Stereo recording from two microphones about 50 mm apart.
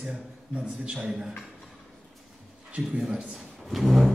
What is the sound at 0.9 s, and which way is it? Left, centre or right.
Speech, centre.